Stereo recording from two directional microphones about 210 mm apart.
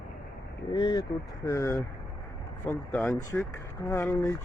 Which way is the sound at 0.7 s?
20° left (ahead or behind).